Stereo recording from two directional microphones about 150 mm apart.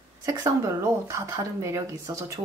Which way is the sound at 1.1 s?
20° right (ahead or behind).